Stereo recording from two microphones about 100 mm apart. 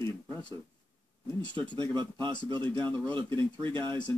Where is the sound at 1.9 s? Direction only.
50° right (ahead or behind).